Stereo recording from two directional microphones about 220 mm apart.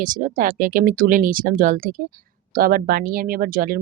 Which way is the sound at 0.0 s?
35° right (ahead or behind).